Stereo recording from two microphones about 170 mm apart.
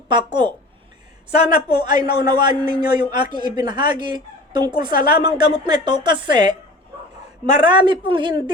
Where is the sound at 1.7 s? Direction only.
25° right (ahead or behind).